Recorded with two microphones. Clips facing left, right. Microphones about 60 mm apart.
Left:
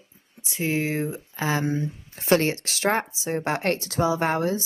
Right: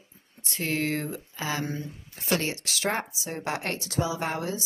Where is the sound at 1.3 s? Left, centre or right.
Left.